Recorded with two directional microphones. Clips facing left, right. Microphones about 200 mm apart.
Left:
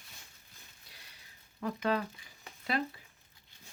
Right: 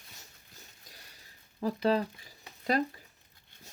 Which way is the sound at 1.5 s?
35° right (ahead or behind).